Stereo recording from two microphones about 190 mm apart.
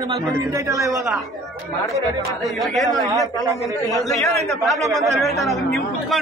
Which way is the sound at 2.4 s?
Centre (ahead or behind).